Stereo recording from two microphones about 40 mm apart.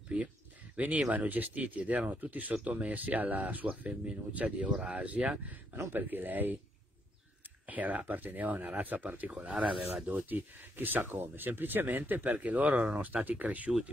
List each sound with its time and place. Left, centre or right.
0.1 s speech: right
5.9 s speech: right
7.6 s speech: right